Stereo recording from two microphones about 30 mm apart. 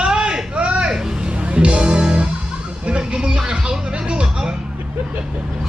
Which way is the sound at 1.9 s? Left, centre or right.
Right.